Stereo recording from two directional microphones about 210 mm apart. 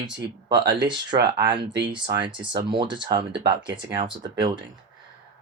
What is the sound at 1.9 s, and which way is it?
Speech, 20° right (ahead or behind).